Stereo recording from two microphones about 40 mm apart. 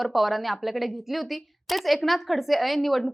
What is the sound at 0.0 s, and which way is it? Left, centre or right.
A woman's voice, centre.